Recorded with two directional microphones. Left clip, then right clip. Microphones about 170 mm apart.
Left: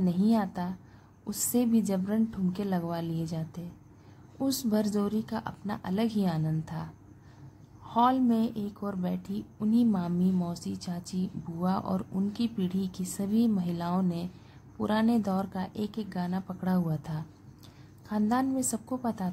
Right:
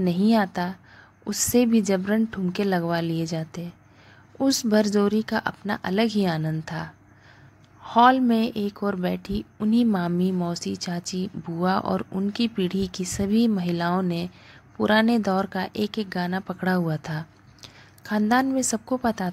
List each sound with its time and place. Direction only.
0.0 s a woman's voice: 20° right (ahead or behind)